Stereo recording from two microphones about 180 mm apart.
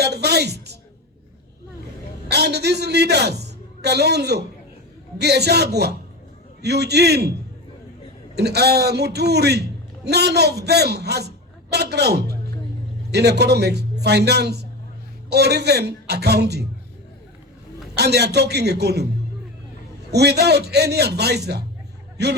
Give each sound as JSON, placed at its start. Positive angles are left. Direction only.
{"t": 0.0, "sound": "speech", "side_deg": -65}
{"t": 2.3, "sound": "a man's voice", "side_deg": -65}
{"t": 8.4, "sound": "a man's voice", "side_deg": -65}
{"t": 17.9, "sound": "a man's voice", "side_deg": -65}
{"t": 20.1, "sound": "a man's voice", "side_deg": -65}